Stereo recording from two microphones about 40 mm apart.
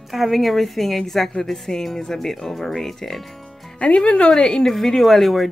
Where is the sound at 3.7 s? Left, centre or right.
Left; by 5.5 s centre.